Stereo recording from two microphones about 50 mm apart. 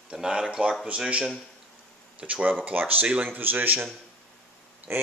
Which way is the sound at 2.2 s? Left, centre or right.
Right.